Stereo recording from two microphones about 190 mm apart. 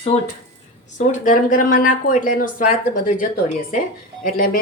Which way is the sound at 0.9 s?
45° left (ahead or behind).